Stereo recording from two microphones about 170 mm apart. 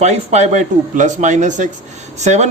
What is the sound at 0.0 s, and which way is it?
Speech, 40° right (ahead or behind).